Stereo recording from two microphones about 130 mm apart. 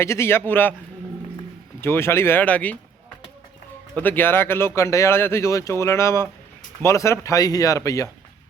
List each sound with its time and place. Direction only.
0.0 s a man's voice: 20° left (ahead or behind)
1.8 s speech: 20° left (ahead or behind)
3.9 s speech: 15° left (ahead or behind)